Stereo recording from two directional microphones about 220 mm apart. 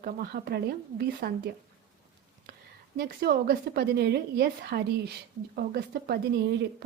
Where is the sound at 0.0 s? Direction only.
45° right (ahead or behind).